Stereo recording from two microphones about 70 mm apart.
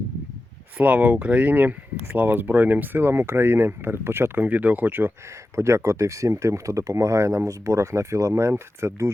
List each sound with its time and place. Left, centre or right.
0.8 s speech: right
5.5 s speech: right